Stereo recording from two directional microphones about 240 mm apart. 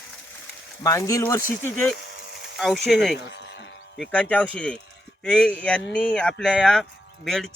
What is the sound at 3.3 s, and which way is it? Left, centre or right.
Sheep, left.